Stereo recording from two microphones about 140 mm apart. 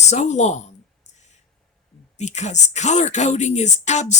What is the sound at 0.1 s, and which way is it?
Speech, 60° left (ahead or behind).